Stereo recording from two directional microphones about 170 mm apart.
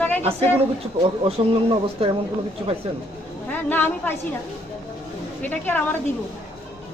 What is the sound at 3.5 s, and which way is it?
Speech, 10° left (ahead or behind).